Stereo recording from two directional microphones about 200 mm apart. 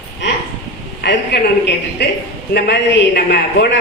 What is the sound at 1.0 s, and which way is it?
A woman's voice, 55° left (ahead or behind).